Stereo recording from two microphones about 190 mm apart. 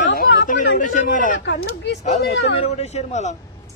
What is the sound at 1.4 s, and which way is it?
Speech, 65° left (ahead or behind).